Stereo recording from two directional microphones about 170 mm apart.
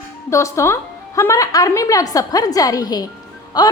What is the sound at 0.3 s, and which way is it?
A woman's voice, 15° left (ahead or behind).